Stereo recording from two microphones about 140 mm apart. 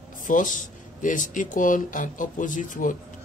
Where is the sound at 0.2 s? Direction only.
65° left (ahead or behind).